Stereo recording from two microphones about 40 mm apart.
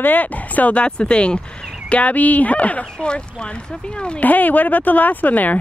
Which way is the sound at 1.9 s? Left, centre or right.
Left.